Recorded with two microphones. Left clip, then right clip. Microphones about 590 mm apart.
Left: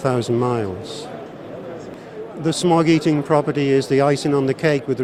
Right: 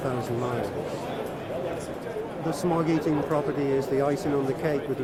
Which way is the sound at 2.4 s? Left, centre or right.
Left.